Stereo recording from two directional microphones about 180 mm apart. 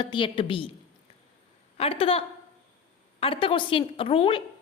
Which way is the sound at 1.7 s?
30° left (ahead or behind).